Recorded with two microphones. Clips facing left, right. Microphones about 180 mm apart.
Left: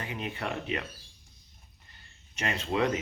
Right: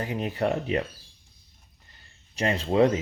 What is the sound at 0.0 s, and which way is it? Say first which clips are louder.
Speech: right 8 dB; 40° right (ahead or behind).